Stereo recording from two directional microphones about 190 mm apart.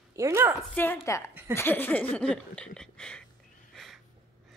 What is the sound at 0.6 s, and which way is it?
A woman's voice, 10° left (ahead or behind).